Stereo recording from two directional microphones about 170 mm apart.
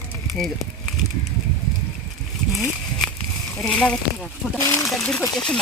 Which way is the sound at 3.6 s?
5° left (ahead or behind).